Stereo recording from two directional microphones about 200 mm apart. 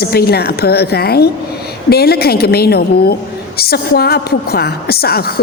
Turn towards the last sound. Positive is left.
turn(degrees=50)  # may be behind; listen again after turning